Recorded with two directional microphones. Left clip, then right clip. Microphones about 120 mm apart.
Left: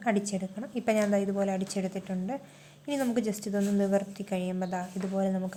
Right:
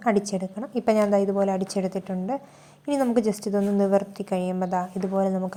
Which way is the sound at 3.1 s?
30° right (ahead or behind).